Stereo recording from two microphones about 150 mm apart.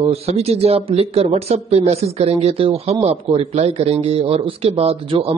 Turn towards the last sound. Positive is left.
turn(degrees=-40)  # may be behind; listen again after turning